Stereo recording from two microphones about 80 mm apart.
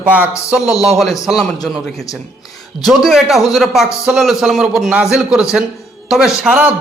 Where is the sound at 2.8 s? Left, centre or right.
Centre.